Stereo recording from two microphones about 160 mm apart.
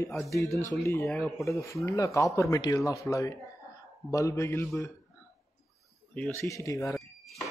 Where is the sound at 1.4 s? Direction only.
20° left (ahead or behind).